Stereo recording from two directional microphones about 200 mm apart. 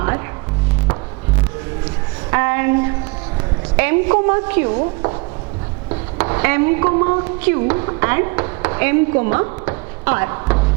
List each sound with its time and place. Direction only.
2.3 s a sound: 15° right (ahead or behind)
3.8 s a woman's voice: 15° right (ahead or behind)
6.1 s speech: 15° right (ahead or behind)